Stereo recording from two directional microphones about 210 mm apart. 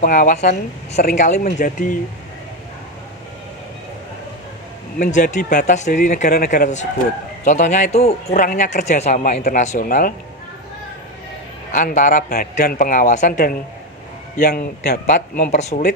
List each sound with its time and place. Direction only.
0.0 s a man's voice: 40° left (ahead or behind)
4.9 s a man's voice: 35° left (ahead or behind)
6.2 s a man's voice: 45° left (ahead or behind)
11.7 s a man's voice: 40° left (ahead or behind)